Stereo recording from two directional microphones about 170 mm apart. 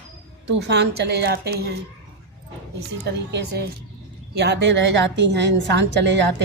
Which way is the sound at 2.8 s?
85° right.